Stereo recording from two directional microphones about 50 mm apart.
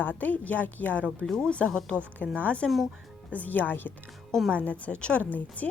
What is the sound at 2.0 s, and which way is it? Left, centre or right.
A woman's voice, left.